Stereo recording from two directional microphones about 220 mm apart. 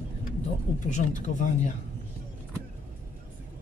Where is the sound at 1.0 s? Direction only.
45° left (ahead or behind).